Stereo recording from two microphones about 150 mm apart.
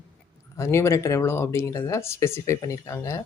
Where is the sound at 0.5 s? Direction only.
20° left (ahead or behind).